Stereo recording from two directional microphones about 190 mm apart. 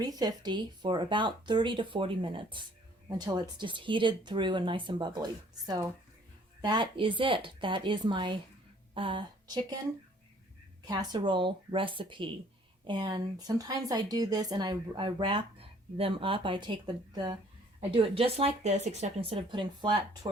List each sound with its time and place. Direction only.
0.0 s speech: 20° right (ahead or behind)
10.8 s speech: 20° right (ahead or behind)